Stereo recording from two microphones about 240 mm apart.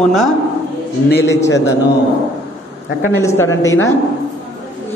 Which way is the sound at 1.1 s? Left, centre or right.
Left.